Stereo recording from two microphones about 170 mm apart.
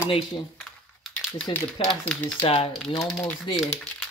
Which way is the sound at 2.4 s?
35° left (ahead or behind).